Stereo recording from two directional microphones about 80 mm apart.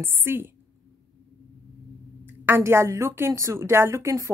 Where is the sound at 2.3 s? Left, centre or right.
Right.